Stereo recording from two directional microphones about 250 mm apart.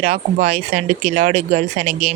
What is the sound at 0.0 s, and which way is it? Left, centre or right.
Speech, right.